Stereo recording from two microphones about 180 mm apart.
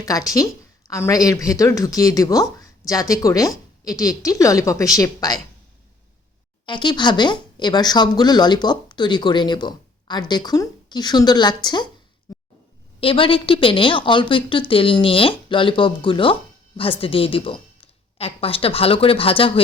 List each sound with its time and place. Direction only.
0.0 s speech: 20° left (ahead or behind)
6.7 s speech: 25° left (ahead or behind)
13.0 s speech: 30° left (ahead or behind)